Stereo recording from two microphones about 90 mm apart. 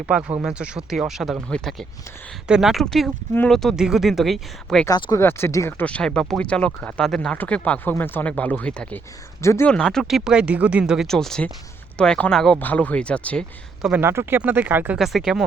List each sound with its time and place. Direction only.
0.0 s speech: 15° right (ahead or behind)
1.5 s speech: 5° left (ahead or behind)
2.5 s speech: 5° right (ahead or behind)
4.9 s speech: 60° left (ahead or behind)
5.1 s speech: 30° left (ahead or behind)
5.8 s speech: 10° left (ahead or behind)
9.4 s speech: 30° left (ahead or behind)
9.6 s speech: 5° left (ahead or behind); by 11.0 s 10° right (ahead or behind)
11.0 s speech: 5° left (ahead or behind)
12.5 s speech: 20° left (ahead or behind)
14.0 s speech: 30° right (ahead or behind)
14.9 s speech: 5° right (ahead or behind)